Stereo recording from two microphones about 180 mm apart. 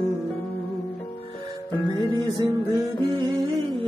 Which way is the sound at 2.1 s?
15° left (ahead or behind).